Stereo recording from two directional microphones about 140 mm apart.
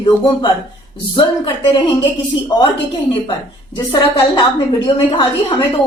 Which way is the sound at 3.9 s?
35° left (ahead or behind).